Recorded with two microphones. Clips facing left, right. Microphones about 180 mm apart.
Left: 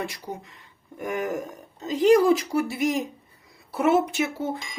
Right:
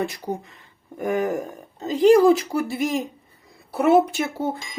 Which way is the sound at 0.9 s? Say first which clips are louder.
Right 5 dB; 30° right (ahead or behind).